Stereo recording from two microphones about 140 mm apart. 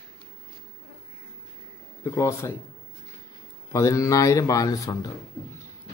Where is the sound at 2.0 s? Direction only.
20° left (ahead or behind).